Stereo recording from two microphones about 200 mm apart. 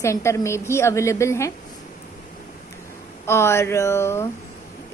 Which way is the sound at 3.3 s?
15° left (ahead or behind).